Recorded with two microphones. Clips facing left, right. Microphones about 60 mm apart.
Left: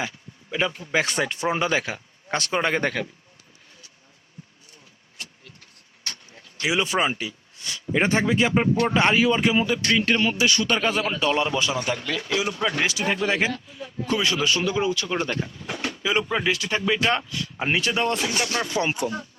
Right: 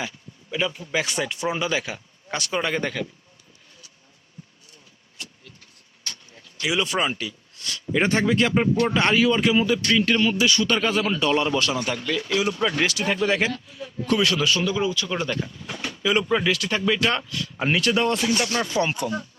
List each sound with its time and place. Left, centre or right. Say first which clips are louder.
0.5 s speech: left 1 dB; left
5.1 s vehicle: even; left
6.3 s speech: left 1 dB; left
10.8 s a man's voice: right 1 dB; centre
15.4 s a sound: left 2 dB; left
16.0 s a man's voice: right 2 dB; centre
18.9 s speech: left 1 dB; left